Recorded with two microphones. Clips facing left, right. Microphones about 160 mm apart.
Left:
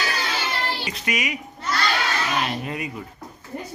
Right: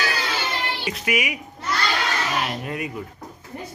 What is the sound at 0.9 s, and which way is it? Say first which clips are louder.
Speech: right 2 dB; 5° right (ahead or behind).